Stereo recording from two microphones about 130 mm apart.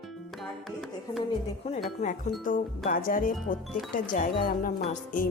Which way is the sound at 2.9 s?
90° left.